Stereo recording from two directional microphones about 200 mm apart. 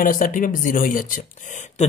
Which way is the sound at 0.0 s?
40° left (ahead or behind).